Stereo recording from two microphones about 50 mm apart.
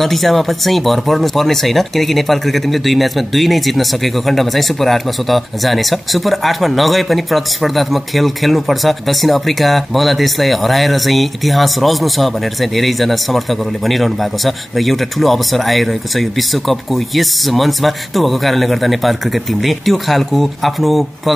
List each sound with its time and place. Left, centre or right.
0.0 s speech: centre